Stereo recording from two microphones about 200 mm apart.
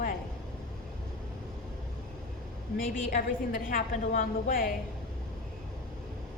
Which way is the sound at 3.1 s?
40° left (ahead or behind).